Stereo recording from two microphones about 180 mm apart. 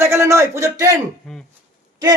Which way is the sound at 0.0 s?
15° right (ahead or behind).